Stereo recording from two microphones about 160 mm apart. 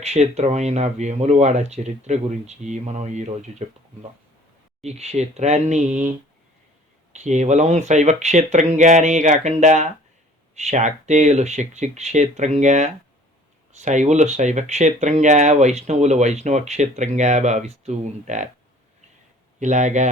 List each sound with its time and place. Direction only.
0.0 s speech: 45° right (ahead or behind)
4.8 s speech: 40° right (ahead or behind)
19.5 s speech: 50° right (ahead or behind)